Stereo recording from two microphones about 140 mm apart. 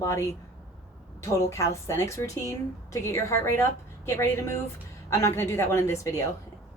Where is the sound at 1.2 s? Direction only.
20° left (ahead or behind).